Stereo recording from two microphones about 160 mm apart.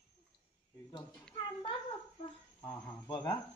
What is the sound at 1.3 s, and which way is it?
Speech, 30° left (ahead or behind).